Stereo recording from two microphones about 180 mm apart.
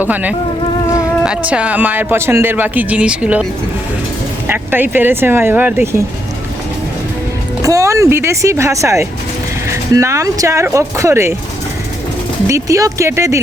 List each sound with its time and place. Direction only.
0.0 s speech: 10° right (ahead or behind)
4.4 s speech: 10° right (ahead or behind)
7.6 s speech: 20° right (ahead or behind)
12.5 s speech: 15° right (ahead or behind)